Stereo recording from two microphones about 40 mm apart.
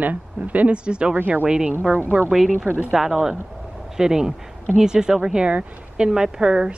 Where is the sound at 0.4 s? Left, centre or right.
Right.